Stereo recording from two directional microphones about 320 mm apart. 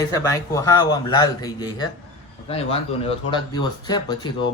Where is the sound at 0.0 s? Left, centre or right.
Centre.